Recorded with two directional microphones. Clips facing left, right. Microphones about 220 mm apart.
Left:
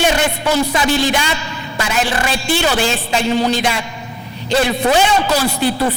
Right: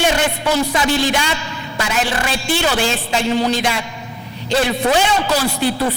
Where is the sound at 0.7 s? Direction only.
10° left (ahead or behind).